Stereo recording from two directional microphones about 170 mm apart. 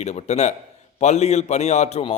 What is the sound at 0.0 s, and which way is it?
A man's voice, 40° left (ahead or behind).